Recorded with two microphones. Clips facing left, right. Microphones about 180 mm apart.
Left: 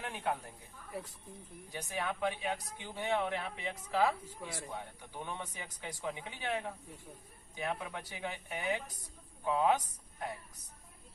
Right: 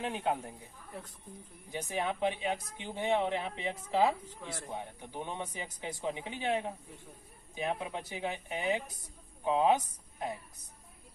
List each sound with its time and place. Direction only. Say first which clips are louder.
0.0 s speech: right 4 dB; 20° right (ahead or behind)
0.9 s speech: left 3 dB; 5° left (ahead or behind)
1.7 s speech: right 4 dB; 20° right (ahead or behind)